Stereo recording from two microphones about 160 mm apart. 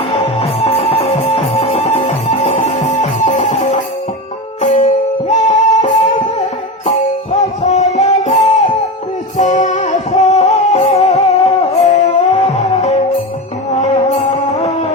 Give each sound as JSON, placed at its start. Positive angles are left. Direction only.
{"t": 0.1, "sound": "music", "side_deg": 40}